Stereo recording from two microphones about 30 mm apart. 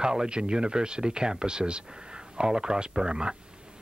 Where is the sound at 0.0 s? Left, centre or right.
Right.